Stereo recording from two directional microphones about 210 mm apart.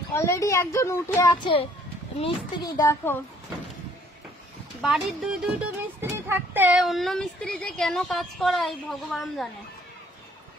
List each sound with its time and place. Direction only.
0.1 s a child's voice: 15° left (ahead or behind)
2.1 s speech: 25° left (ahead or behind)
2.8 s a child's voice: 15° left (ahead or behind)
4.8 s speech: centre (ahead or behind)